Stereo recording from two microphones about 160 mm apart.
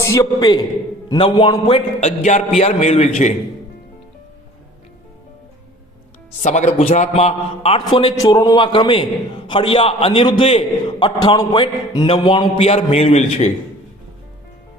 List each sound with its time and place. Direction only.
0.0 s a man's voice: 20° left (ahead or behind); by 3.3 s 45° left (ahead or behind)
6.4 s a man's voice: 50° left (ahead or behind)
8.1 s a man's voice: 20° left (ahead or behind); by 13.5 s 45° left (ahead or behind)